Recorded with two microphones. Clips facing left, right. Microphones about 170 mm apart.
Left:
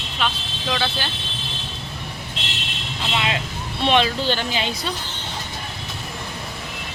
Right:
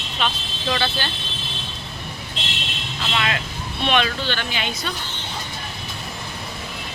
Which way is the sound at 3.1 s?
20° left (ahead or behind).